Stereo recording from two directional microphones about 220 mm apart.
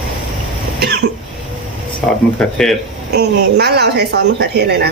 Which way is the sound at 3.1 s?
50° right (ahead or behind).